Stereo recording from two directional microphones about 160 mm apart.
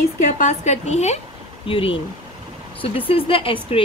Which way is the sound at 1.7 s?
35° left (ahead or behind).